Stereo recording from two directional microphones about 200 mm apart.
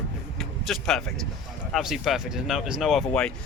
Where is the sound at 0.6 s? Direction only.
Centre (ahead or behind).